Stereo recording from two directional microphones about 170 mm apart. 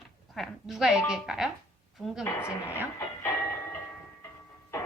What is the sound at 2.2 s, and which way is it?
Speech, 15° left (ahead or behind).